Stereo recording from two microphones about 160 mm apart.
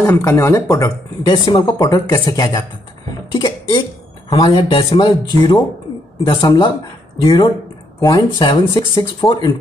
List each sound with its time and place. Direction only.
0.0 s speech: 15° left (ahead or behind)
3.3 s cough: 30° left (ahead or behind)
4.3 s speech: 30° left (ahead or behind)